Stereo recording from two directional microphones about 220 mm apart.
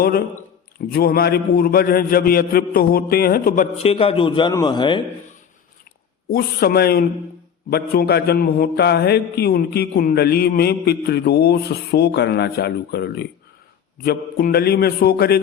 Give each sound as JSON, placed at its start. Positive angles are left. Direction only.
{"t": 0.9, "sound": "a man's voice", "side_deg": 45}
{"t": 3.8, "sound": "a man's voice", "side_deg": 25}
{"t": 6.2, "sound": "a man's voice", "side_deg": 45}